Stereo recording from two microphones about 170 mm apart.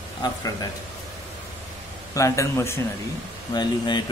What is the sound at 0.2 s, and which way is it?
Speech, 20° left (ahead or behind).